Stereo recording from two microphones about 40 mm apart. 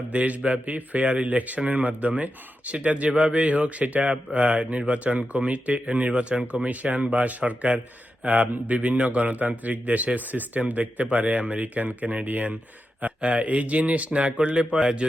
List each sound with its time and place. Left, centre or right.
0.1 s a man's voice: right